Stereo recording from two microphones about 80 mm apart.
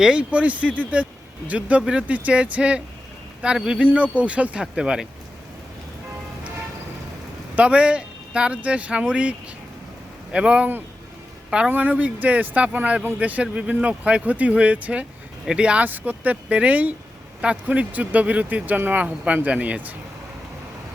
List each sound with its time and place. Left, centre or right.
0.0 s speech: centre
7.5 s speech: centre
10.3 s speech: centre
11.7 s speech: right